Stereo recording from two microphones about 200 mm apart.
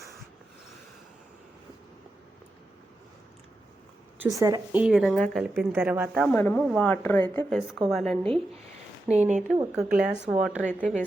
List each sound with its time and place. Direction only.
4.2 s a woman's voice: 15° right (ahead or behind)
4.8 s speech: 5° right (ahead or behind)
5.7 s a woman's voice: 10° right (ahead or behind)
6.3 s speech: 10° left (ahead or behind)
9.0 s speech: 35° right (ahead or behind)
9.7 s speech: 5° right (ahead or behind)